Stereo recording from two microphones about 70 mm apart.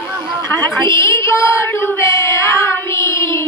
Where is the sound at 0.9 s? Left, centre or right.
Left.